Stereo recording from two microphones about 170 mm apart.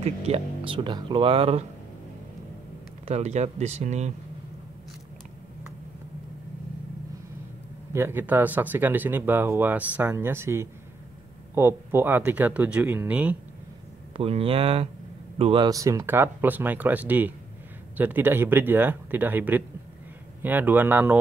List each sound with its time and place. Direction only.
0.0 s speech: 35° right (ahead or behind)
3.1 s speech: 40° right (ahead or behind)
7.9 s speech: 15° right (ahead or behind)
14.1 s speech: 35° right (ahead or behind); by 21.2 s 10° right (ahead or behind)